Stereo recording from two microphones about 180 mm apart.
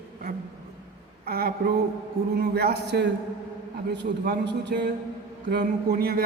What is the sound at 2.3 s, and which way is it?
A man's voice, 60° right (ahead or behind).